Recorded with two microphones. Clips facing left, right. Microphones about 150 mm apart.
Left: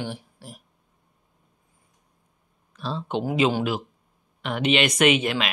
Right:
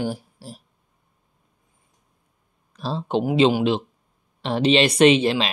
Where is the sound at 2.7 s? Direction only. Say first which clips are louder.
Right 4 dB; 35° right (ahead or behind).